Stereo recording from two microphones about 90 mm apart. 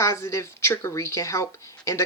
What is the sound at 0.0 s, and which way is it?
Speech, 35° left (ahead or behind).